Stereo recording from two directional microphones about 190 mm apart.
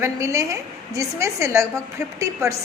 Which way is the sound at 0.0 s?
15° right (ahead or behind).